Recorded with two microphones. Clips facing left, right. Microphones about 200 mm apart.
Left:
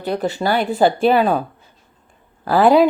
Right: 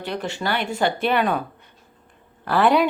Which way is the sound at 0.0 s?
40° left (ahead or behind).